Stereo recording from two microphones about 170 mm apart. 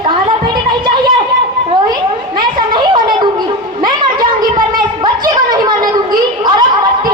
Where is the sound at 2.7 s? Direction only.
25° right (ahead or behind).